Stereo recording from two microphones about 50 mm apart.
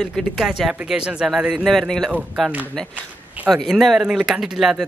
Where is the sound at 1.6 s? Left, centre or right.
Centre.